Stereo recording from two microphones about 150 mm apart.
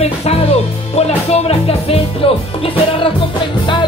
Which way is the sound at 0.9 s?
45° left (ahead or behind).